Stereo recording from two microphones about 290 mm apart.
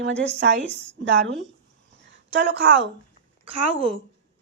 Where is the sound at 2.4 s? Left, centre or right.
Right.